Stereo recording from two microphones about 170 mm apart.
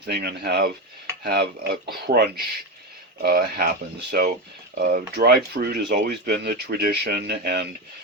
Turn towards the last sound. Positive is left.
turn(degrees=-70)  # may be behind; listen again after turning